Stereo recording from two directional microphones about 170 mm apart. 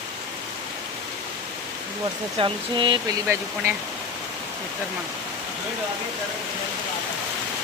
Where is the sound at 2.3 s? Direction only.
30° right (ahead or behind).